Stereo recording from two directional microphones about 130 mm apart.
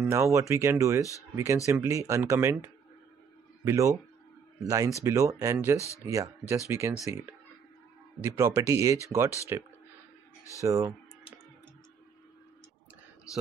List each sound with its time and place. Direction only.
0.0 s speech: 20° right (ahead or behind)
10.6 s speech: 25° right (ahead or behind)